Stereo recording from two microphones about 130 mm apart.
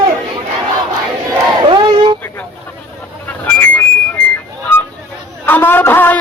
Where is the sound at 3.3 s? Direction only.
10° left (ahead or behind).